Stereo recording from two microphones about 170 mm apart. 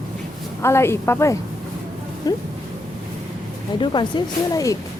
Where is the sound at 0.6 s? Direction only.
15° left (ahead or behind).